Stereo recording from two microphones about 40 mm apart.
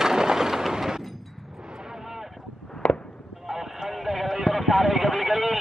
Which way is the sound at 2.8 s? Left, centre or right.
Left.